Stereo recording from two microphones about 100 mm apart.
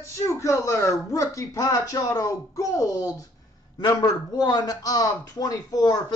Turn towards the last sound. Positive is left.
turn(degrees=40)  # may be behind; listen again after turning